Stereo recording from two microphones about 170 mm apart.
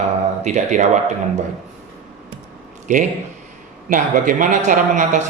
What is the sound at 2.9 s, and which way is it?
Speech, 45° right (ahead or behind).